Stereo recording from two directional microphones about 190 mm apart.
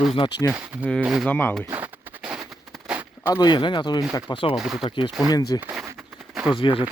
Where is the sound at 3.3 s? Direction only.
20° left (ahead or behind).